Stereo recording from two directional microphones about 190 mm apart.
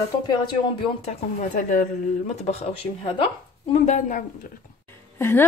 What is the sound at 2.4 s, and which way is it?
Speech, 35° left (ahead or behind).